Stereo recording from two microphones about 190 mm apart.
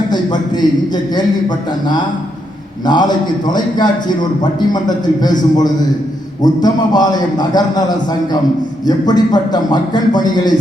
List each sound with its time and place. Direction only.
2.8 s a man's voice: 20° left (ahead or behind)